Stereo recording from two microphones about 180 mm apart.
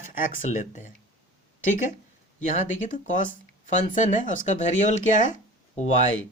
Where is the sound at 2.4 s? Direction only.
45° left (ahead or behind).